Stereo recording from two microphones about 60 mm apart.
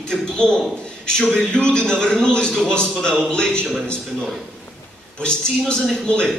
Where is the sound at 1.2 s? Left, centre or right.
Centre.